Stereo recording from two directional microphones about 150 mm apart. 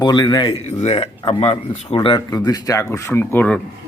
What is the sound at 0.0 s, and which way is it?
Speech, 30° left (ahead or behind).